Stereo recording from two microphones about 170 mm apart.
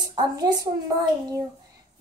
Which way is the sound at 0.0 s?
25° right (ahead or behind).